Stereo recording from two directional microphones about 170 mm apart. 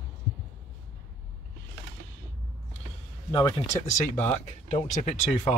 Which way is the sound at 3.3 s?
25° left (ahead or behind).